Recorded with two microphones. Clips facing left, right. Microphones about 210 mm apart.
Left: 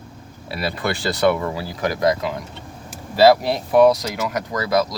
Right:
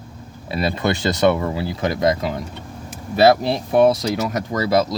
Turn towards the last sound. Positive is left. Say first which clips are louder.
# right 2 dB
turn(degrees=-25)  # may be behind; listen again after turning